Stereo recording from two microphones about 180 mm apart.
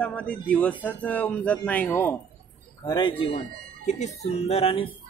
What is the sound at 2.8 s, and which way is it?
Speech, 25° left (ahead or behind).